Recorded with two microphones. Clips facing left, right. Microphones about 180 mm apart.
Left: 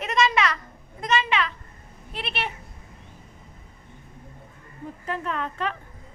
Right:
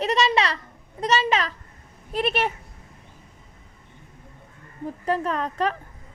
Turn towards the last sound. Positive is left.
turn(degrees=-40)  # may be behind; listen again after turning